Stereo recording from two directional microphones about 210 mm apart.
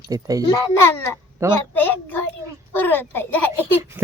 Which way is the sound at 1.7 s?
10° left (ahead or behind).